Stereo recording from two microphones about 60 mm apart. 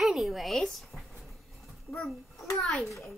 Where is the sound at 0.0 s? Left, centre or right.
Centre.